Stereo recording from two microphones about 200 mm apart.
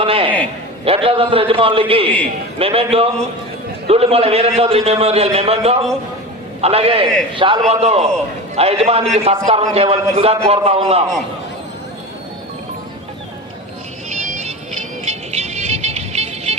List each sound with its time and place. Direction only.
0.0 s a man's voice: 25° right (ahead or behind)
14.2 s music: 40° right (ahead or behind)